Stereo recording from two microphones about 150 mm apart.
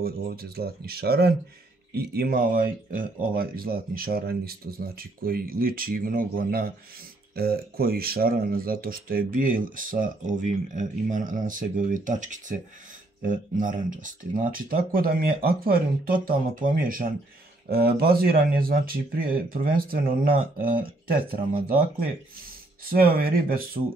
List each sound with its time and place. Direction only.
0.0 s speech: 90° right
7.3 s speech: 90° right; by 17.1 s 70° right (ahead or behind)
17.6 s speech: 85° right; by 20.8 s 70° right (ahead or behind)
22.8 s speech: 75° right (ahead or behind)